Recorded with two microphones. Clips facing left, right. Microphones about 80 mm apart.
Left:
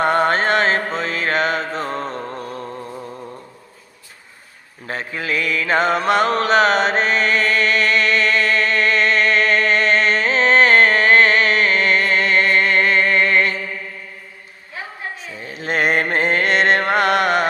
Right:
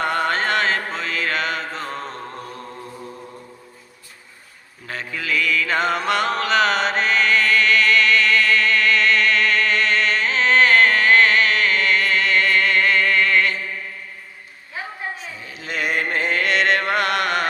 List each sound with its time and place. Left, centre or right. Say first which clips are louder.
0.0 s mantra: left 5 dB; left
4.9 s mantra: left 2 dB; left
15.4 s music: left 9 dB; left